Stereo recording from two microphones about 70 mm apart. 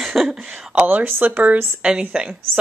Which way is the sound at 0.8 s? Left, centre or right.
Right.